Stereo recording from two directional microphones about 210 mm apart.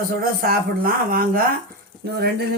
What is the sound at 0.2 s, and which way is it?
Speech, 45° right (ahead or behind).